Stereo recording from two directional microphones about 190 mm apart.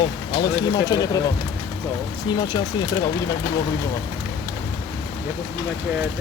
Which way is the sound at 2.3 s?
20° left (ahead or behind).